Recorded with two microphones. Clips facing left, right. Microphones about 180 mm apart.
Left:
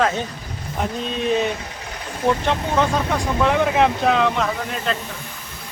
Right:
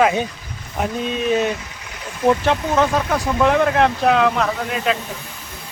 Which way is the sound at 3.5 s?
Centre (ahead or behind).